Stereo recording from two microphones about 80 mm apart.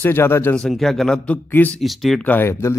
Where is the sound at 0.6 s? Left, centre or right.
Centre; by 1.8 s left.